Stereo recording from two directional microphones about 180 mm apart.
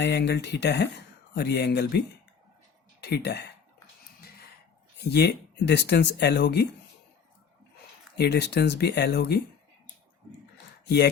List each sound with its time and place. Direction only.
0.0 s speech: 70° left (ahead or behind)
5.0 s speech: 65° left (ahead or behind)
8.1 s speech: 65° left (ahead or behind)
10.8 s speech: 65° left (ahead or behind)